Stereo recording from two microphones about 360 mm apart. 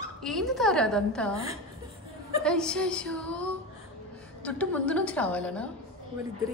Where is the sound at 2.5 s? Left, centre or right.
Centre.